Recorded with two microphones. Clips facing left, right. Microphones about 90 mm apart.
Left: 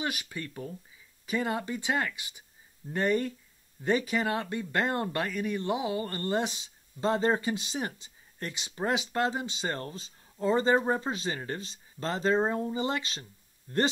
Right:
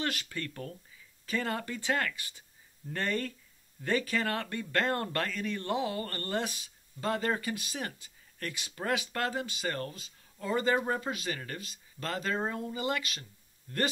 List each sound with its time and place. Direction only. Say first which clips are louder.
0.0 s speech: left 1 dB; 15° left (ahead or behind)